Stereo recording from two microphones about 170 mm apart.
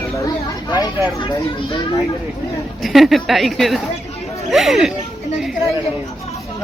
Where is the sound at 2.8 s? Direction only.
Centre (ahead or behind).